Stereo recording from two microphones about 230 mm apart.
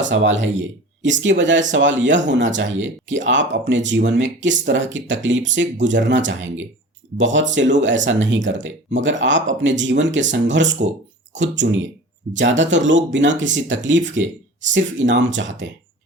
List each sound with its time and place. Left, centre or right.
0.0 s speech: right